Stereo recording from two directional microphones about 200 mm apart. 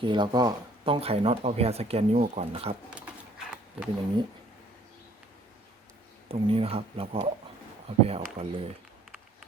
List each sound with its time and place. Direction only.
0.0 s speech: 25° right (ahead or behind)
2.9 s a sound: 5° right (ahead or behind)
6.2 s speech: 30° right (ahead or behind)